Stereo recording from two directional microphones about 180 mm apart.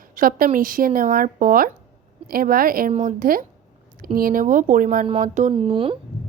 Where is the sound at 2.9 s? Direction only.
40° right (ahead or behind).